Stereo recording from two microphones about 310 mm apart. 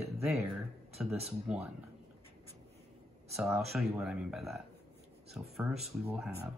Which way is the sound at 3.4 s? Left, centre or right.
Centre.